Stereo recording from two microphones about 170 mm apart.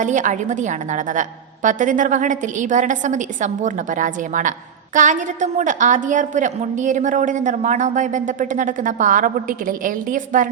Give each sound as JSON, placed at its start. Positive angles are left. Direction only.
{"t": 0.0, "sound": "a woman's voice", "side_deg": -45}